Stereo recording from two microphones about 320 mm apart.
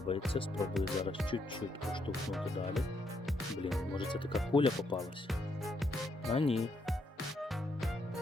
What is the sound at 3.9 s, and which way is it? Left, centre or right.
Speech, centre.